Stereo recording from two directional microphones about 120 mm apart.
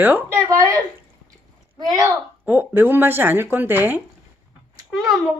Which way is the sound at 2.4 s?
15° right (ahead or behind).